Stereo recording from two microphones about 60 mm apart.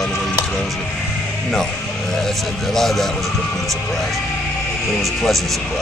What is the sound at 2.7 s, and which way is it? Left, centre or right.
Speech, centre.